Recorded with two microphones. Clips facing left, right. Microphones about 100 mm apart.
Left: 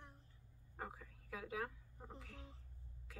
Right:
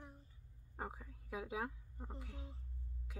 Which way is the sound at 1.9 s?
Centre (ahead or behind).